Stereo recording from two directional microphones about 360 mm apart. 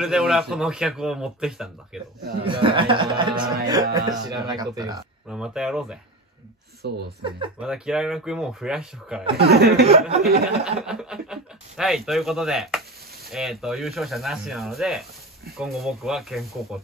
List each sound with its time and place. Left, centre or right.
0.0 s speech: centre
2.4 s speech: centre
6.8 s speech: right
7.2 s speech: centre
7.5 s speech: centre
9.5 s speech: right
10.6 s speech: centre